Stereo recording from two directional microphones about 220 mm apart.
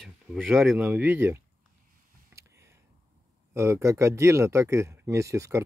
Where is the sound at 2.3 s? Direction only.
15° right (ahead or behind).